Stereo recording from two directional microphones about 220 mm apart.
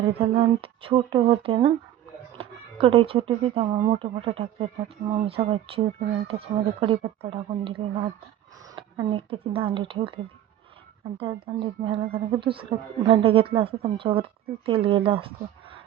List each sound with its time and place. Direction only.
0.2 s speech: 25° right (ahead or behind)
11.2 s speech: 25° right (ahead or behind)